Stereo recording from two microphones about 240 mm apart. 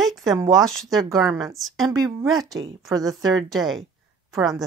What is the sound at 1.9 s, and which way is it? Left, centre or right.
Speech, centre.